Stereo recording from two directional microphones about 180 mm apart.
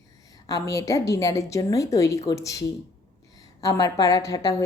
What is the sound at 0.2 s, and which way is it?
A woman's voice, 20° left (ahead or behind).